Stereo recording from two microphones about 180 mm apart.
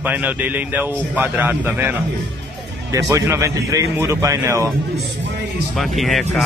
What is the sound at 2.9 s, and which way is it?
A man's voice, 15° right (ahead or behind).